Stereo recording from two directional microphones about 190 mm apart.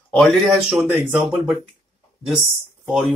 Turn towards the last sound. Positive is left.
turn(degrees=0)  # may be behind; listen again after turning